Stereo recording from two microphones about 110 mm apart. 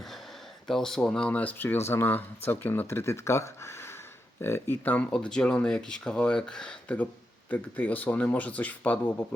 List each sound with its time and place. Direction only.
0.7 s speech: 5° left (ahead or behind)